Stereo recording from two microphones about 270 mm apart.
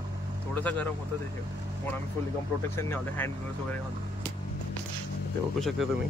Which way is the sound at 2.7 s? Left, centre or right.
Centre.